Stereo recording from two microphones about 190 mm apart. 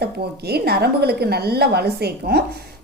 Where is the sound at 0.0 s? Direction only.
55° right (ahead or behind).